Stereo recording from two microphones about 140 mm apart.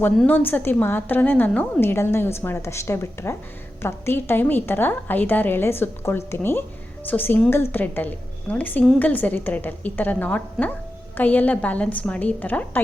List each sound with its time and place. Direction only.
0.3 s a woman's voice: 15° left (ahead or behind)